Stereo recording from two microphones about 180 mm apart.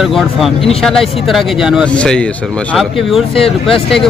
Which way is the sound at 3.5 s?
30° left (ahead or behind).